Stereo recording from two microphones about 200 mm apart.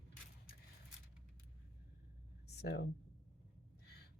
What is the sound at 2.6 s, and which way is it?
Speech, 55° left (ahead or behind).